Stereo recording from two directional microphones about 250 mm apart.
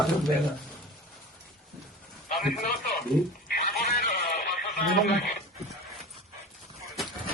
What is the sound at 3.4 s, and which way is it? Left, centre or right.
Radio, left.